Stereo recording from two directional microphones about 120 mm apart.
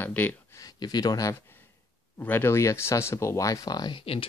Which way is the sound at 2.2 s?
15° left (ahead or behind).